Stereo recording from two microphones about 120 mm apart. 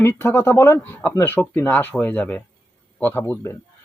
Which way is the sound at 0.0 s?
20° left (ahead or behind).